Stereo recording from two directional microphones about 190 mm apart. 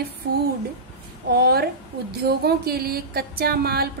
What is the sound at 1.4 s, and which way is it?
A woman's voice, 55° right (ahead or behind).